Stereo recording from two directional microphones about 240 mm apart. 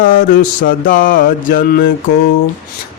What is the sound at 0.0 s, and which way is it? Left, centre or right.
Mantra, left.